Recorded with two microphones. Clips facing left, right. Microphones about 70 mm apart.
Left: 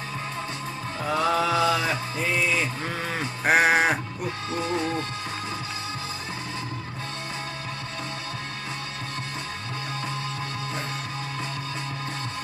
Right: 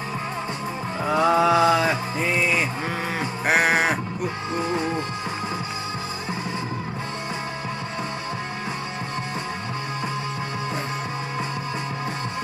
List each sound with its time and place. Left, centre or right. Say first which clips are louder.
1.0 s music: right 5 dB; centre
3.2 s sheep: left 1 dB; centre
4.6 s music: right 2 dB; centre